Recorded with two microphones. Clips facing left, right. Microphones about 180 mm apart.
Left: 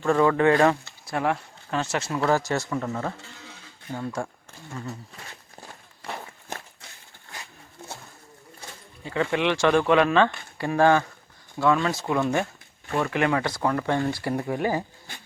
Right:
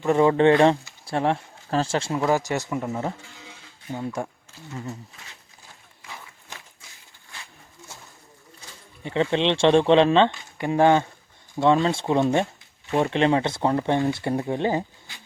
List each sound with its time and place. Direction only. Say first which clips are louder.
0.0 s speech: right 2 dB; 20° right (ahead or behind)
2.2 s speech: left 2 dB; 15° right (ahead or behind)
5.5 s walk: left 7 dB; 65° left (ahead or behind)
9.0 s speech: right 2 dB; 25° right (ahead or behind)